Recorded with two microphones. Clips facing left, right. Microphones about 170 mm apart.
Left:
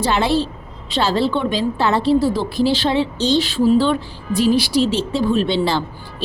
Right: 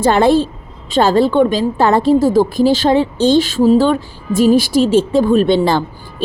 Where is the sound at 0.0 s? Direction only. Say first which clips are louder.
Right 7 dB; 50° right (ahead or behind).